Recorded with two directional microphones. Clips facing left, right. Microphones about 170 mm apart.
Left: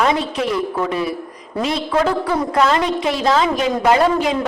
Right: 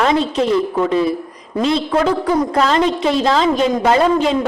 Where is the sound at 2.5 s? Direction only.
25° right (ahead or behind).